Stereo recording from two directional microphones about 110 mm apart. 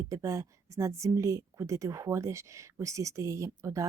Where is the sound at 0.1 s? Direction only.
30° right (ahead or behind).